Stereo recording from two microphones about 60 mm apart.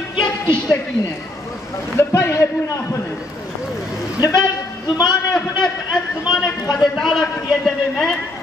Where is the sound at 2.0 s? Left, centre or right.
Left.